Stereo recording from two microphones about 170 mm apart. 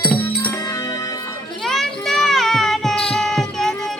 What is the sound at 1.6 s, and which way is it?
Children playing, 5° left (ahead or behind).